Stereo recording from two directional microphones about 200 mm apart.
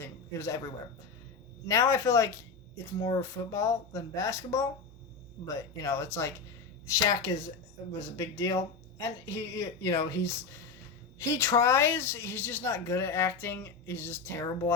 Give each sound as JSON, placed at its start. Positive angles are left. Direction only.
{"t": 0.0, "sound": "a sound", "side_deg": 15}
{"t": 1.6, "sound": "speech", "side_deg": 15}
{"t": 11.2, "sound": "speech", "side_deg": 15}